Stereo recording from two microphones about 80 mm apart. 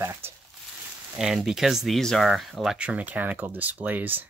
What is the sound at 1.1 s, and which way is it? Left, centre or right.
Speech, centre.